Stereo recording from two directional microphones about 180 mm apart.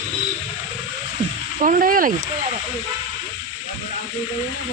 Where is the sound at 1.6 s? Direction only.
50° right (ahead or behind).